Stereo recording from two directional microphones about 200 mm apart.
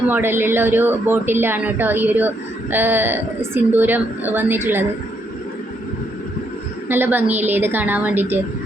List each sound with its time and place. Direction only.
0.1 s speech: 10° right (ahead or behind)
6.8 s speech: 10° right (ahead or behind)